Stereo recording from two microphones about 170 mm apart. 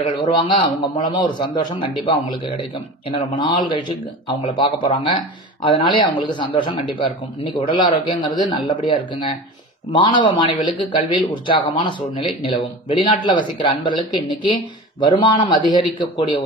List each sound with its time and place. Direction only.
0.1 s speech: 25° left (ahead or behind)